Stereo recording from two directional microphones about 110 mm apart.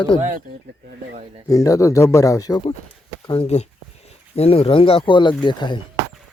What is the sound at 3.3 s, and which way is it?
Speech, 65° left (ahead or behind).